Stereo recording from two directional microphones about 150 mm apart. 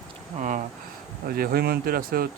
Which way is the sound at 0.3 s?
60° right (ahead or behind).